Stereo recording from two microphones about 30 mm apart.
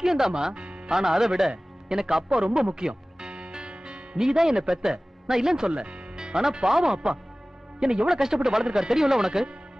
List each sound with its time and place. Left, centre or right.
0.0 s speech: centre
2.5 s music: right
4.2 s speech: centre
5.7 s speech: right
6.1 s speech: right